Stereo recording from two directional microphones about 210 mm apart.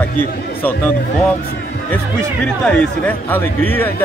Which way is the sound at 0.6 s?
10° left (ahead or behind).